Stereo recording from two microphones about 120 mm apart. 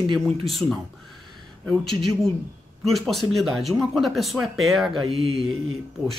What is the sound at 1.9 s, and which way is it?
Speech, centre (ahead or behind).